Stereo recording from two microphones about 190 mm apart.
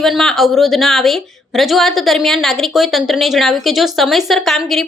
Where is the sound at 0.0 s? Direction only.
Centre (ahead or behind).